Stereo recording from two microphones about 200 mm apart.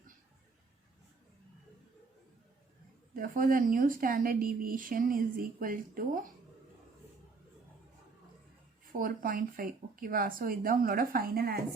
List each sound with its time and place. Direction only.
3.2 s a woman's voice: 45° right (ahead or behind)
8.9 s a woman's voice: 45° right (ahead or behind)